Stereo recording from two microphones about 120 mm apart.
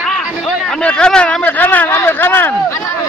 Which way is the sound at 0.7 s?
5° left (ahead or behind).